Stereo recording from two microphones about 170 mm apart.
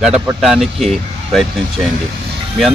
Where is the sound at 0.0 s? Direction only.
5° right (ahead or behind).